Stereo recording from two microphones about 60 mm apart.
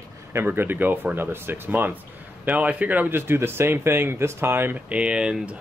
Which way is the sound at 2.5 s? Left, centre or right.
Right.